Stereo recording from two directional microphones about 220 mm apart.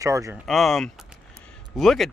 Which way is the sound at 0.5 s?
Centre (ahead or behind).